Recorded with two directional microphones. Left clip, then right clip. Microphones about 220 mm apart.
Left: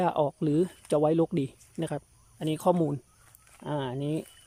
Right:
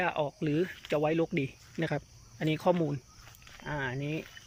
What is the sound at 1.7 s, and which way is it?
Speech, 10° left (ahead or behind).